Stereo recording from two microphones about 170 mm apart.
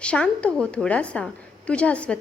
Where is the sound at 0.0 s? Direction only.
5° left (ahead or behind).